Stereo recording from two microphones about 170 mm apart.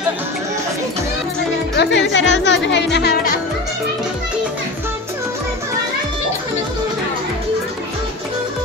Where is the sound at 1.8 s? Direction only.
90° left; by 3.3 s 65° left (ahead or behind).